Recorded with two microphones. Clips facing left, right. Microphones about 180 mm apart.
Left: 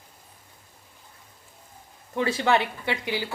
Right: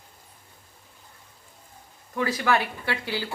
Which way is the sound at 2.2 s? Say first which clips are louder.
Left 2 dB; 25° left (ahead or behind).